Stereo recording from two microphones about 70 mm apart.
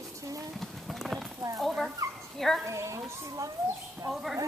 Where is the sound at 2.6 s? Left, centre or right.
Right.